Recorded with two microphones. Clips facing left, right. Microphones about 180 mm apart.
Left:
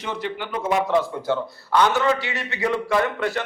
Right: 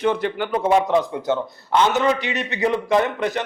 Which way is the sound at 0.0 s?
55° right (ahead or behind).